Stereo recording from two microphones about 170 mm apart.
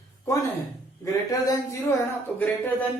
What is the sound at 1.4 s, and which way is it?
Speech, 20° left (ahead or behind).